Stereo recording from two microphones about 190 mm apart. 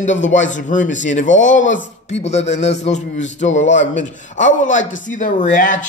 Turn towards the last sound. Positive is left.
turn(degrees=40)  # may be behind; listen again after turning